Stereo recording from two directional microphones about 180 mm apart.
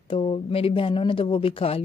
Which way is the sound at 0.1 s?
30° left (ahead or behind).